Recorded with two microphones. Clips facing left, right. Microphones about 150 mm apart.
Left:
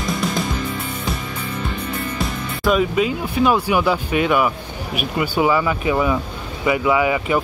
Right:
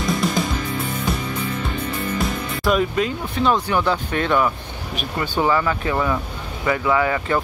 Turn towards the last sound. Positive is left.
turn(degrees=10)  # may be behind; listen again after turning